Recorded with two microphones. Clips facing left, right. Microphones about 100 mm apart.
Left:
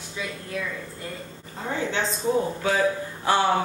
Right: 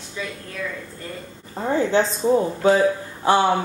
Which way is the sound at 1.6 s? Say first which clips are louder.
Right 8 dB; 35° right (ahead or behind).